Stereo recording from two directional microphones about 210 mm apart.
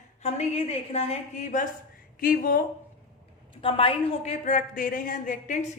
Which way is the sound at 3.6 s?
25° left (ahead or behind).